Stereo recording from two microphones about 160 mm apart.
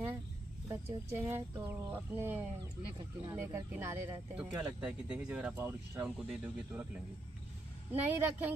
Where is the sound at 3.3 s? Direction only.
15° right (ahead or behind).